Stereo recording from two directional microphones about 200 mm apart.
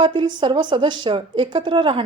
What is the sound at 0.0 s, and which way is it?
Speech, 25° right (ahead or behind).